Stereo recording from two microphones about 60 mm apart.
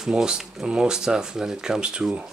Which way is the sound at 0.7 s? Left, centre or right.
Centre.